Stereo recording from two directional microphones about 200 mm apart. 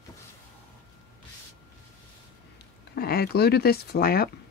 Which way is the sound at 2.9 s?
50° left (ahead or behind).